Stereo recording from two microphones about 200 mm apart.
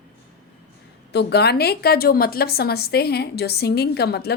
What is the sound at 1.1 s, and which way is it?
Speech, 55° left (ahead or behind).